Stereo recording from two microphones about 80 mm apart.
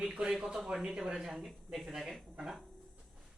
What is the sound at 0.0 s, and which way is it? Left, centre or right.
Speech, centre.